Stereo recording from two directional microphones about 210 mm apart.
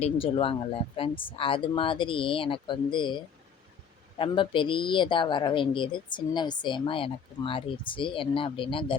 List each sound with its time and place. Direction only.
0.0 s speech: 25° left (ahead or behind)
4.2 s speech: 25° left (ahead or behind)